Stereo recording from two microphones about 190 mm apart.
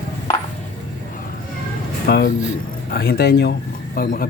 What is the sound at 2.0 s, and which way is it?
A man's voice, 55° left (ahead or behind).